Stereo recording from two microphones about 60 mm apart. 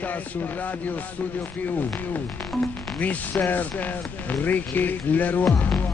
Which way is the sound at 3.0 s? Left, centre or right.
Left.